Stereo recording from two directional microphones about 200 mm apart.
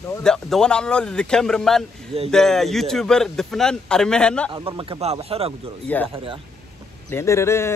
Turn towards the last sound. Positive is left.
turn(degrees=15)  # may be behind; listen again after turning